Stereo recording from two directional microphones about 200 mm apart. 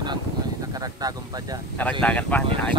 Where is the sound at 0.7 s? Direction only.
20° right (ahead or behind).